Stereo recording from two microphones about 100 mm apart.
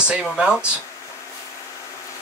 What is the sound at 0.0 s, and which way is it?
Speech, 10° right (ahead or behind).